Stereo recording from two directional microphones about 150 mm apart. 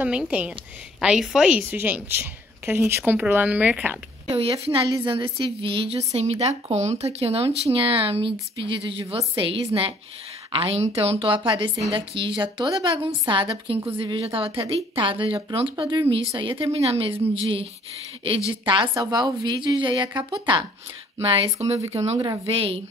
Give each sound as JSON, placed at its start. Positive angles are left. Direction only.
{"t": 0.0, "sound": "a woman's voice", "side_deg": -10}
{"t": 4.3, "sound": "a woman's voice", "side_deg": -40}